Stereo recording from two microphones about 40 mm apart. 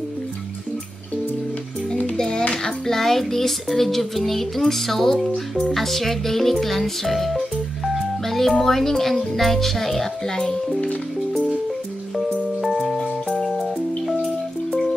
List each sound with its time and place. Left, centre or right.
2.1 s music: centre
2.5 s a child's voice: centre
5.6 s music: centre
10.3 s a child's voice: centre
12.6 s music: centre